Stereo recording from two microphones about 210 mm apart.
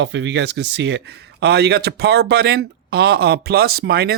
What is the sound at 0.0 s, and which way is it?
Speech, 55° right (ahead or behind).